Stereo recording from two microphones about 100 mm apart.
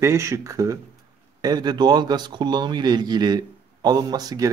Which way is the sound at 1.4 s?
45° right (ahead or behind).